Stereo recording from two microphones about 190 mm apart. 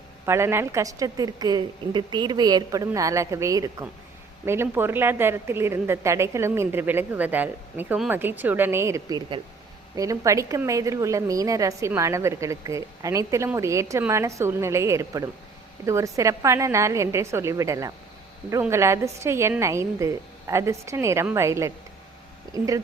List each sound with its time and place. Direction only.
0.3 s a woman's voice: 15° right (ahead or behind)